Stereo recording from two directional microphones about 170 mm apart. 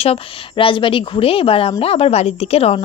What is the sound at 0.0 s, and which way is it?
Speech, 35° left (ahead or behind).